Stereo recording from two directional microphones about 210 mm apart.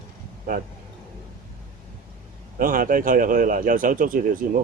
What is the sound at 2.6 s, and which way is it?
Speech, 40° right (ahead or behind).